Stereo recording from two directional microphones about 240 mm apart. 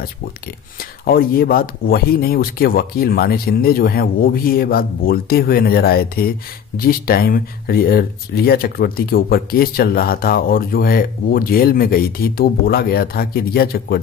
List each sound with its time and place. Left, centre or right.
0.7 s speech: left